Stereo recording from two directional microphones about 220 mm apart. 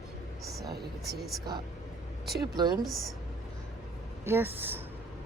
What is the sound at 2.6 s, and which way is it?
Speech, 20° right (ahead or behind).